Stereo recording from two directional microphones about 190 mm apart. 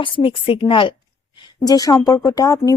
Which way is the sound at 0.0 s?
30° left (ahead or behind).